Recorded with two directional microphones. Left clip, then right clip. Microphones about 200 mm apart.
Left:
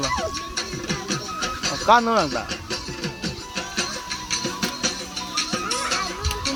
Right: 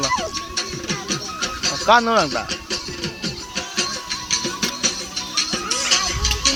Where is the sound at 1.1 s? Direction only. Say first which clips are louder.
Right 1 dB; 60° left (ahead or behind).